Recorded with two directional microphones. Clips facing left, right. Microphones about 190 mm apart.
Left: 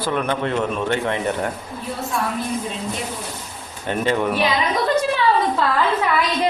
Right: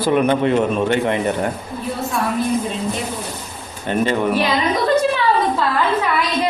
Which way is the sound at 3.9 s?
Centre (ahead or behind).